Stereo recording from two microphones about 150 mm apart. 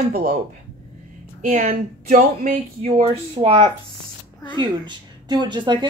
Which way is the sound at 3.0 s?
40° right (ahead or behind).